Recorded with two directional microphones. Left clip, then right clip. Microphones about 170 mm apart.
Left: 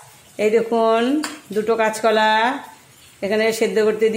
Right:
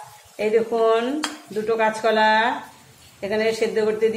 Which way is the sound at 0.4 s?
55° left (ahead or behind).